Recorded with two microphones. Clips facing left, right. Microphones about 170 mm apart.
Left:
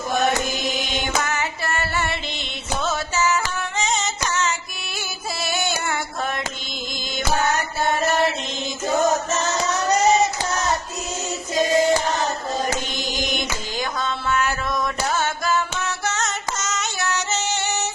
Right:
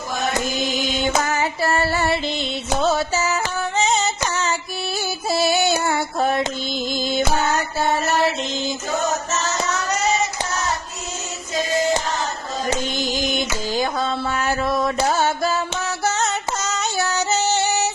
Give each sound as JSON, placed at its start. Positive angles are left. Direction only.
{"t": 1.2, "sound": "female singing", "side_deg": -30}
{"t": 2.8, "sound": "music", "side_deg": -35}
{"t": 5.3, "sound": "female singing", "side_deg": -35}
{"t": 13.7, "sound": "mantra", "side_deg": -35}